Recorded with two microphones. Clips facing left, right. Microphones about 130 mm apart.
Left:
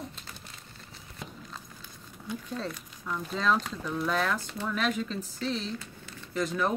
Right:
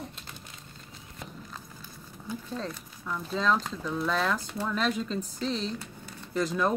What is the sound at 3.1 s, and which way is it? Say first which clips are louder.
Speech: right 1 dB; centre (ahead or behind).